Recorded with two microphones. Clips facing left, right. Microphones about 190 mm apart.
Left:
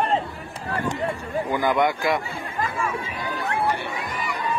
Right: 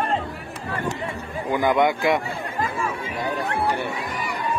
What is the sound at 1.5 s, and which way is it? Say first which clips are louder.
Speech: right 3 dB; 20° right (ahead or behind).